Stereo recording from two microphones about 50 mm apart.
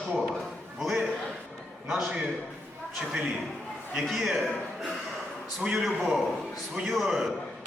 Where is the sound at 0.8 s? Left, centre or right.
Centre.